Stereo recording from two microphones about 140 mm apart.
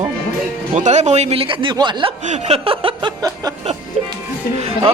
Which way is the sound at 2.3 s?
50° right (ahead or behind).